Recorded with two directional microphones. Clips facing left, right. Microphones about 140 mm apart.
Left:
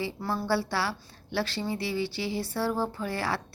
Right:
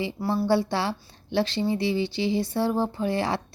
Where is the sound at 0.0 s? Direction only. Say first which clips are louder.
Right 5 dB; 15° right (ahead or behind).